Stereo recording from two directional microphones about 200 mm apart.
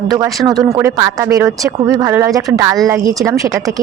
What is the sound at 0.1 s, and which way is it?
Speech, 20° right (ahead or behind).